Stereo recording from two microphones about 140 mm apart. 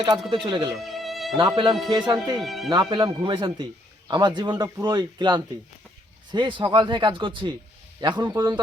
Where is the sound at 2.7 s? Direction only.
30° right (ahead or behind).